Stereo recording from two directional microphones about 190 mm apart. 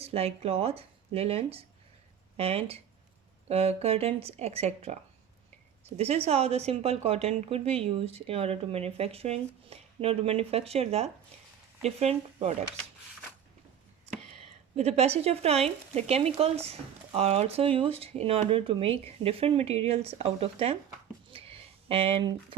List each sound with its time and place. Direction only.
0.0 s a woman's voice: 30° right (ahead or behind)
6.0 s a woman's voice: 35° right (ahead or behind)
14.8 s a woman's voice: 35° right (ahead or behind)
21.2 s a sound: 30° right (ahead or behind)